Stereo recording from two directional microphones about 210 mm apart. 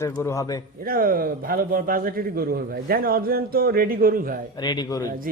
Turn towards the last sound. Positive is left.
turn(degrees=20)  # may be behind; listen again after turning